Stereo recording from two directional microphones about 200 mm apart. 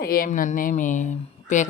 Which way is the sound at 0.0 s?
45° left (ahead or behind).